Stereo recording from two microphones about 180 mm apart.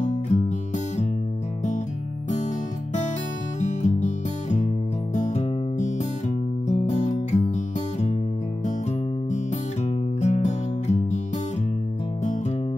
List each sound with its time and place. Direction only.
0.3 s music: 40° left (ahead or behind)
3.5 s music: 40° left (ahead or behind)
10.2 s music: 40° left (ahead or behind)